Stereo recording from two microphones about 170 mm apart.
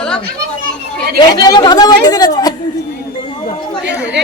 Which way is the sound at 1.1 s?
25° left (ahead or behind).